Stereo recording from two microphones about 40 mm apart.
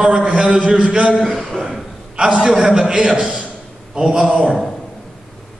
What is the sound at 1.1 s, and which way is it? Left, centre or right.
Speech, centre.